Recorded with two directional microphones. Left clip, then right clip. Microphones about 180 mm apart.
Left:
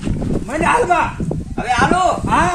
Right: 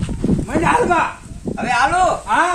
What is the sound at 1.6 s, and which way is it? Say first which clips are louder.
Speech: left 1 dB; 15° right (ahead or behind).